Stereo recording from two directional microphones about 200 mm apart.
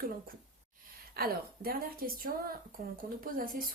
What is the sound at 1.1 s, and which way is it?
Speech, 50° right (ahead or behind).